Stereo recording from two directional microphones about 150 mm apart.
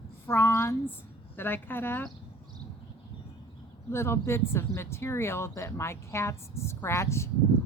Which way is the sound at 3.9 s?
15° left (ahead or behind).